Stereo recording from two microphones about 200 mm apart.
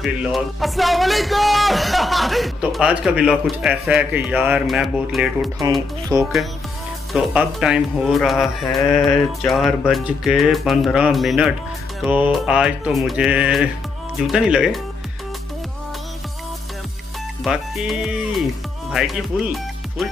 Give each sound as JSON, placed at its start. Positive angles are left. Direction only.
{"t": 0.0, "sound": "speech", "side_deg": 0}
{"t": 6.1, "sound": "speech", "side_deg": -15}
{"t": 7.1, "sound": "speech", "side_deg": -5}
{"t": 17.4, "sound": "speech", "side_deg": 0}